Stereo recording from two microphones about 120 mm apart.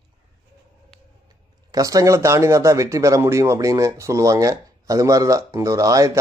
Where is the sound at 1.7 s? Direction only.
30° right (ahead or behind).